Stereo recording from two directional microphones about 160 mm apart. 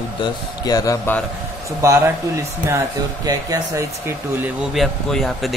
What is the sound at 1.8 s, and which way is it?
Speech, 20° right (ahead or behind).